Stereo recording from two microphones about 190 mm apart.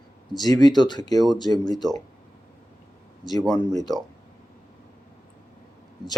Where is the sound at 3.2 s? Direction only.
20° left (ahead or behind).